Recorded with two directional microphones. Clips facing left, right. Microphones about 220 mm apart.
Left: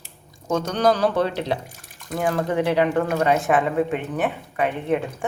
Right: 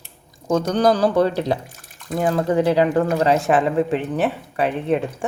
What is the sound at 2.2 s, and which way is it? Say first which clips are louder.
Speech: right 3 dB; 30° right (ahead or behind).